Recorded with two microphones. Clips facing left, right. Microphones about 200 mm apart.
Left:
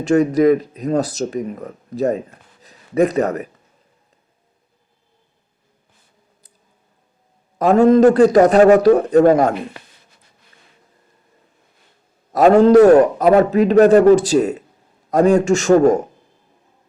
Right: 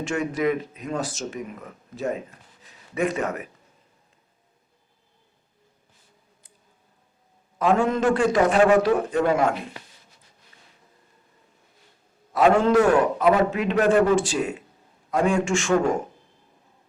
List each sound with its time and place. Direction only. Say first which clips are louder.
0.0 s speech: left 11 dB; 40° left (ahead or behind)
7.6 s speech: left 10 dB; 40° left (ahead or behind)
12.3 s speech: left 8 dB; 40° left (ahead or behind)